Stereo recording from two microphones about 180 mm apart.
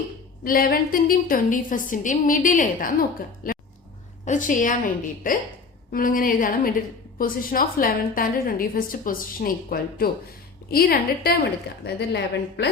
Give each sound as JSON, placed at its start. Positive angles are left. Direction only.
{"t": 0.4, "sound": "a woman's voice", "side_deg": 55}